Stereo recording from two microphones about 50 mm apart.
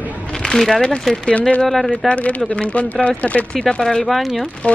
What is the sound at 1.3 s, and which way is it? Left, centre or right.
Speech, left.